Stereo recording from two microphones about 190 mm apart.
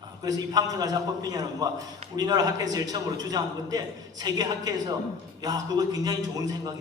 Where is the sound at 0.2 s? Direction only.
20° right (ahead or behind).